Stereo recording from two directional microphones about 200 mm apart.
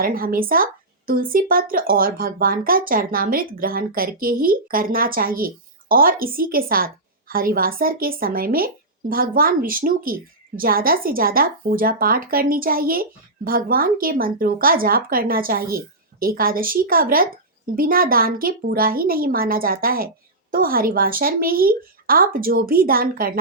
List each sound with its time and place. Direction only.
0.0 s speech: 45° right (ahead or behind)